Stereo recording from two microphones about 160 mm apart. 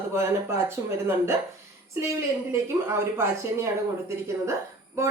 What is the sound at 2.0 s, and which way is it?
Speech, 15° right (ahead or behind).